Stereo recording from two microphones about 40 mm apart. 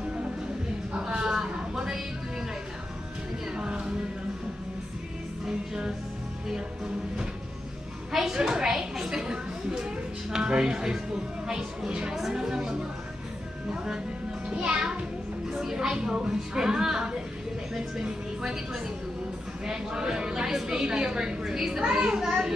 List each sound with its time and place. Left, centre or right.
0.9 s a sound: right
3.5 s music: right
8.1 s a sound: centre
11.4 s speech: centre
14.5 s a child's voice: right
15.5 s a woman's voice: centre